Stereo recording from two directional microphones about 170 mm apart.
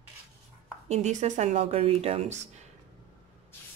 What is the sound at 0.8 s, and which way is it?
Speech, 40° right (ahead or behind).